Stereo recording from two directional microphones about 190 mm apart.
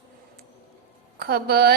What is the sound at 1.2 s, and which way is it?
Speech, 55° right (ahead or behind).